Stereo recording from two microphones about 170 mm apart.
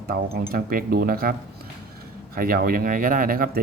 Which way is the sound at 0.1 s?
60° right (ahead or behind).